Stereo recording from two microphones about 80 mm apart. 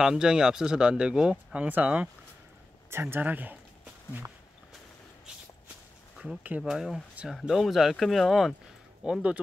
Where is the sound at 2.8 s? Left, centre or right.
Right.